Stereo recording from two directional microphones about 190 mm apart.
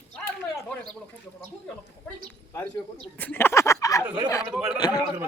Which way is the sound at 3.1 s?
10° left (ahead or behind).